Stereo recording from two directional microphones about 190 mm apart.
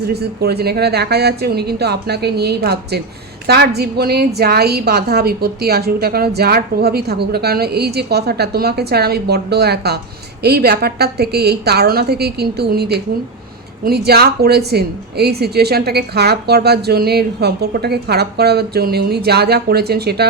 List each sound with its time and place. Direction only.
0.0 s a woman's voice: 55° right (ahead or behind)